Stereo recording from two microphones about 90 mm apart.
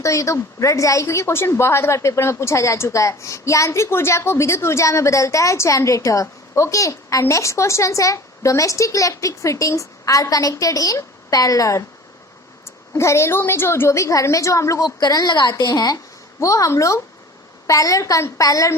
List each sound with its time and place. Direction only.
0.0 s a woman's voice: 35° left (ahead or behind)
14.8 s a woman's voice: 50° left (ahead or behind)
16.4 s a woman's voice: 35° left (ahead or behind)